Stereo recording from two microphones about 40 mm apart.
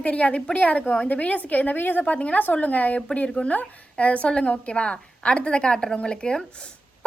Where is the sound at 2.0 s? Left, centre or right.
Left.